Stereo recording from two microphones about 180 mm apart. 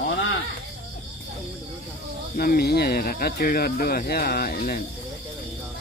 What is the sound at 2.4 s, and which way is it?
Speech, 60° left (ahead or behind).